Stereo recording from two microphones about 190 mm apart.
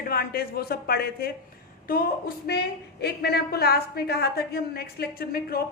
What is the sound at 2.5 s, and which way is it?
A woman's voice, 60° left (ahead or behind).